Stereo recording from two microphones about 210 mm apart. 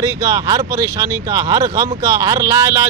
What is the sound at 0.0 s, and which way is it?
Speech, 15° right (ahead or behind).